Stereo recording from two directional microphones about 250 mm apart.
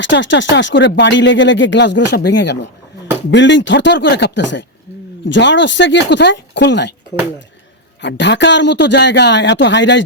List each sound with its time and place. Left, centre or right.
0.0 s speech: left
8.0 s speech: left